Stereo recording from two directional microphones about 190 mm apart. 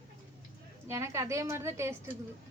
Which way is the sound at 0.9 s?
15° right (ahead or behind).